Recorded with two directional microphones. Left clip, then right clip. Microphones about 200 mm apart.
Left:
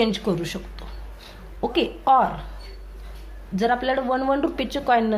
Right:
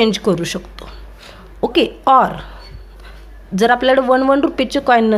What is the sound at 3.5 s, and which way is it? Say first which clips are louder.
A woman's voice: right 9 dB; 35° right (ahead or behind).